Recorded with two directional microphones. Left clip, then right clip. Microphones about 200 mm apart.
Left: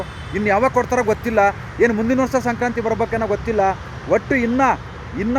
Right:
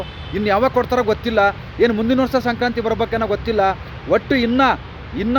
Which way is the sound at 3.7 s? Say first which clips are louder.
Right 1 dB; 5° right (ahead or behind).